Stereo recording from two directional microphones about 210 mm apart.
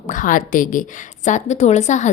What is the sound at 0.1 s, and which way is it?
A woman's voice, 40° left (ahead or behind).